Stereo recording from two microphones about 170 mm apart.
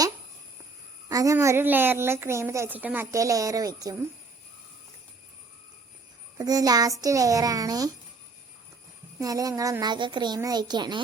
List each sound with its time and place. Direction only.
1.0 s a woman's voice: 20° right (ahead or behind)
6.4 s a woman's voice: 20° right (ahead or behind)
9.1 s a woman's voice: 20° right (ahead or behind)